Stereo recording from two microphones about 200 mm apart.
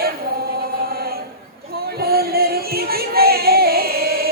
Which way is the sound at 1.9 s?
50° right (ahead or behind).